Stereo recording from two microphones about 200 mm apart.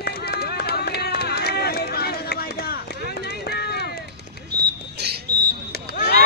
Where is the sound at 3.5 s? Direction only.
55° left (ahead or behind).